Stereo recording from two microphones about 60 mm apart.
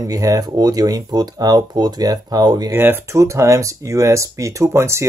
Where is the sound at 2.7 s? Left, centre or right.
Right.